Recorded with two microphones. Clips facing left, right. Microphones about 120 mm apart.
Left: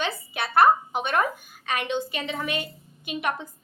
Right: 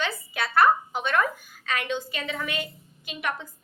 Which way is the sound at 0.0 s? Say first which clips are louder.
Left 1 dB; 20° left (ahead or behind).